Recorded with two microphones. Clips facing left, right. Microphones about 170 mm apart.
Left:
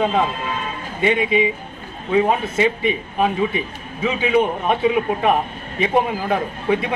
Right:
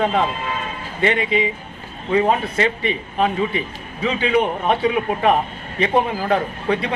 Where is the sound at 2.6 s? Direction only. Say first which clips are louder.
Left 2 dB; 15° left (ahead or behind).